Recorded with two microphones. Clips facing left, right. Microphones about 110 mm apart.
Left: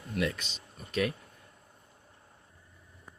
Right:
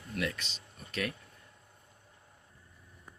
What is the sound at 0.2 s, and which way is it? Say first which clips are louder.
Speech: left 4 dB; 15° left (ahead or behind).